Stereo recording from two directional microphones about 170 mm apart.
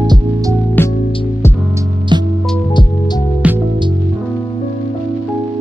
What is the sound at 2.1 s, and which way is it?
Music, 25° right (ahead or behind).